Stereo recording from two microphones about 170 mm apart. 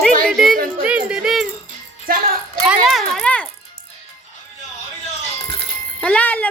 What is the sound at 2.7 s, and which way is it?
Speech, centre (ahead or behind).